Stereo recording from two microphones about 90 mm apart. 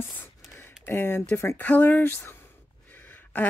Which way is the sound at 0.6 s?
25° left (ahead or behind).